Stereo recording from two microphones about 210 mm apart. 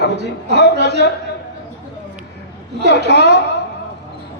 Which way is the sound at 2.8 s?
55° right (ahead or behind).